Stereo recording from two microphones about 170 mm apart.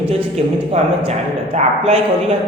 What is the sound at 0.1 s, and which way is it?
Speech, 35° right (ahead or behind).